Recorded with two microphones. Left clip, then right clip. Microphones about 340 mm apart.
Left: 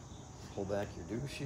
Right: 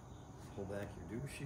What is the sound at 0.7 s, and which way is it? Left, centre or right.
Speech, centre.